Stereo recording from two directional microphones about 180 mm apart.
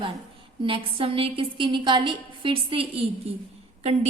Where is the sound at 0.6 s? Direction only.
30° right (ahead or behind).